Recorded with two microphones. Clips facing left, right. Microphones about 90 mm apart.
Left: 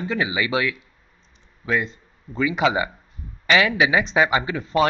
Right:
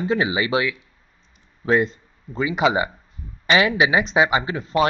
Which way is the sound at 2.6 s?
10° right (ahead or behind).